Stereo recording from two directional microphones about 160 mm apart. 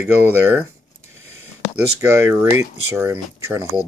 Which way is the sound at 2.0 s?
15° right (ahead or behind).